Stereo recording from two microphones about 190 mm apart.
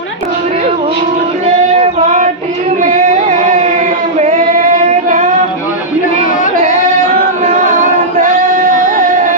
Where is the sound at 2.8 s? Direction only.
40° right (ahead or behind).